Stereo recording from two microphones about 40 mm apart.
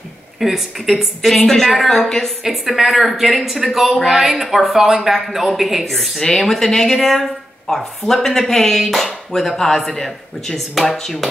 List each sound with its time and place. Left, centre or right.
0.4 s speech: centre
2.4 s speech: centre